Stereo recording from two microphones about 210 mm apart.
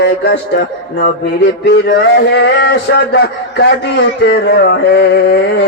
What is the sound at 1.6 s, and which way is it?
A man's voice, 50° left (ahead or behind).